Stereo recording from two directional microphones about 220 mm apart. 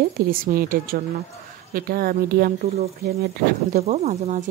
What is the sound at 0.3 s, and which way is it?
Speech, 40° right (ahead or behind).